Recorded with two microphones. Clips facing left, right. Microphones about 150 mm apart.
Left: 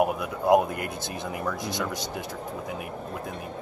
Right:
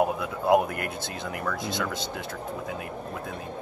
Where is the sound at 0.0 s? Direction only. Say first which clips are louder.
Left 1 dB; 20° left (ahead or behind).